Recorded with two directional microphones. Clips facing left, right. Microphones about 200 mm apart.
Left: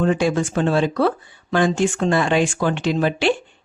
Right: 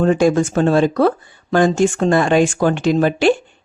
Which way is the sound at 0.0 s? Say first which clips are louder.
Right 5 dB; 45° right (ahead or behind).